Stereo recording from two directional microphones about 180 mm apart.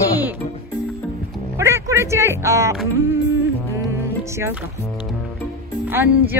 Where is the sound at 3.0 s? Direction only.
15° right (ahead or behind).